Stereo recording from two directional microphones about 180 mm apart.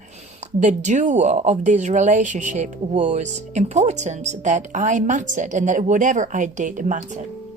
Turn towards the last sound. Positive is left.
turn(degrees=-45)  # may be behind; listen again after turning